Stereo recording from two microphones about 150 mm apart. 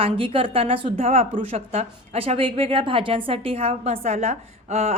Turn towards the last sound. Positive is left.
turn(degrees=-45)  # may be behind; listen again after turning